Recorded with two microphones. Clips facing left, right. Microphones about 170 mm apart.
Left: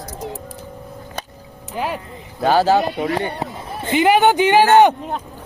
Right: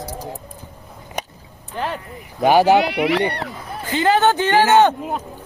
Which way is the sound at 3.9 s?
15° left (ahead or behind).